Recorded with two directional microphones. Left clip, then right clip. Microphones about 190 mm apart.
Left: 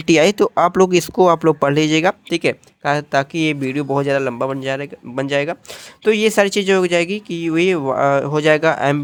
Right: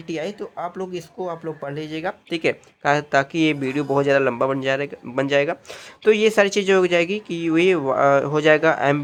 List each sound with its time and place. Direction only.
0.0 s speech: 50° left (ahead or behind)
2.3 s speech: 25° left (ahead or behind)